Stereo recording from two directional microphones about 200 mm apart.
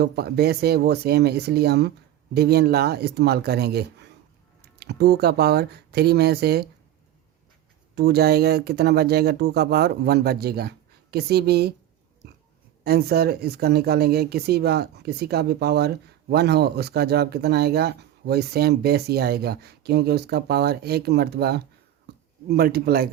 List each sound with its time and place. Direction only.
0.0 s speech: 55° right (ahead or behind)
7.9 s speech: 55° right (ahead or behind)
12.8 s speech: 50° right (ahead or behind)
22.1 s a sound: 55° right (ahead or behind)
22.4 s speech: 50° right (ahead or behind)